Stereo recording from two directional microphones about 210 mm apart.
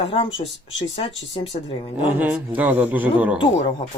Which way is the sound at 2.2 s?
10° right (ahead or behind).